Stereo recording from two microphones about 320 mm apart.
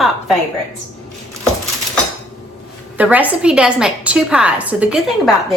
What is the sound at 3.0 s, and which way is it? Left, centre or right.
Speech, centre.